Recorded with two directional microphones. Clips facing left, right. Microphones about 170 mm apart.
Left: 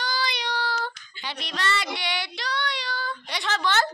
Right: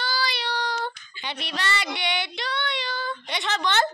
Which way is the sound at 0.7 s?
25° right (ahead or behind).